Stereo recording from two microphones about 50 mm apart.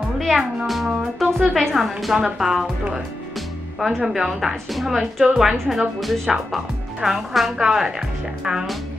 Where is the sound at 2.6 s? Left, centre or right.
Centre.